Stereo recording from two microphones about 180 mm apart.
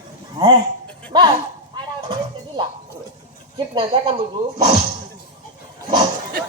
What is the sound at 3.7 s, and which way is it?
Speech, 30° right (ahead or behind).